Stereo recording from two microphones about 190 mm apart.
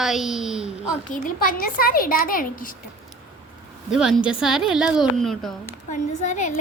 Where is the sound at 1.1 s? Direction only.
50° left (ahead or behind).